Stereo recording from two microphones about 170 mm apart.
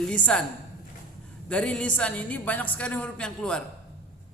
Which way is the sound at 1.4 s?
5° left (ahead or behind).